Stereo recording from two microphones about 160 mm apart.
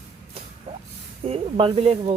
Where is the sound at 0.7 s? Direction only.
35° right (ahead or behind).